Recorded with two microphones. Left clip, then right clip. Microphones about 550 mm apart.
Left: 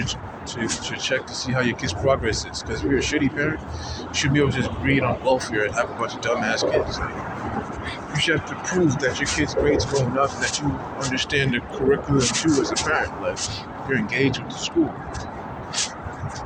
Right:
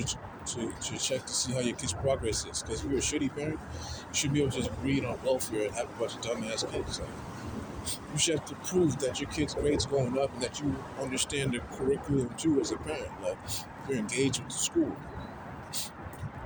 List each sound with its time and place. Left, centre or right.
0.9 s speech: right
8.2 s speech: right